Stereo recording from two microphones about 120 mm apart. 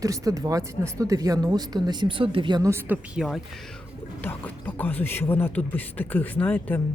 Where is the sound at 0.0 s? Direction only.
30° right (ahead or behind).